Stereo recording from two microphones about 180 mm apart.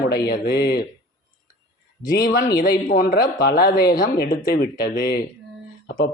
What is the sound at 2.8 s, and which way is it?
Speech, 55° left (ahead or behind).